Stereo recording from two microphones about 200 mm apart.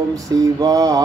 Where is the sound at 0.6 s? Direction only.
20° right (ahead or behind).